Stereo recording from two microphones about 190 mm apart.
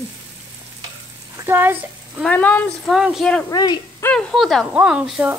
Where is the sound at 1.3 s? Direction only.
10° right (ahead or behind).